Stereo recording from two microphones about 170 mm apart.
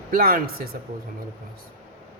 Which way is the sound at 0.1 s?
60° right (ahead or behind).